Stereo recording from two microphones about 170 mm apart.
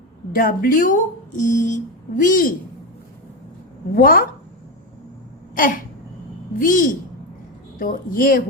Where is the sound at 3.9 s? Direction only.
55° left (ahead or behind).